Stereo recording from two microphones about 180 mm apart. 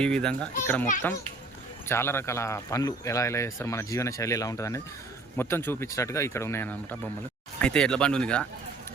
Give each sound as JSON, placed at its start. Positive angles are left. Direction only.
{"t": 0.0, "sound": "a man's voice", "side_deg": 5}
{"t": 1.9, "sound": "a man's voice", "side_deg": 15}